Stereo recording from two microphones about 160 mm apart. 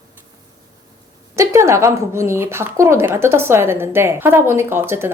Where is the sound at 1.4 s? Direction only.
20° right (ahead or behind).